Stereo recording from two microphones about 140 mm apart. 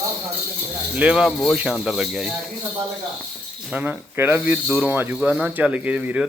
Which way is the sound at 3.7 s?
15° right (ahead or behind).